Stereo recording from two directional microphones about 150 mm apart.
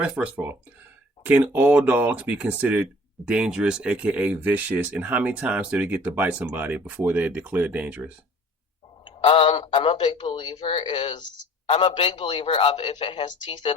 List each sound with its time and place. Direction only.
0.0 s speech: 10° right (ahead or behind)
9.0 s a man's voice: 35° left (ahead or behind)